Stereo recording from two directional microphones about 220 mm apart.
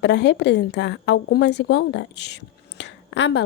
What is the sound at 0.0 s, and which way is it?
A woman's voice, 50° left (ahead or behind).